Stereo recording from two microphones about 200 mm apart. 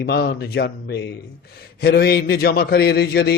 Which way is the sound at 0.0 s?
55° left (ahead or behind).